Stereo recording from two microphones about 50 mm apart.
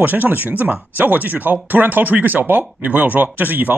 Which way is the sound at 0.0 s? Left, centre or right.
Right.